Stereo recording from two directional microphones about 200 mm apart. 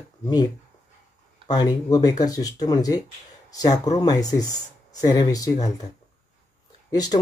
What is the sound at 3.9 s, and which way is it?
Speech, 20° left (ahead or behind).